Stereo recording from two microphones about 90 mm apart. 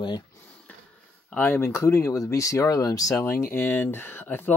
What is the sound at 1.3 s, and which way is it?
Speech, 25° left (ahead or behind).